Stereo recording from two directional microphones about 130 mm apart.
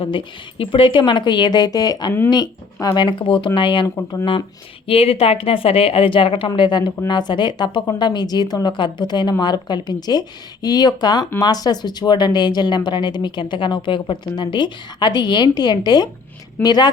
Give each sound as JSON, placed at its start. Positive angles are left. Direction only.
{"t": 0.0, "sound": "speech", "side_deg": 40}
{"t": 4.9, "sound": "a woman's voice", "side_deg": 45}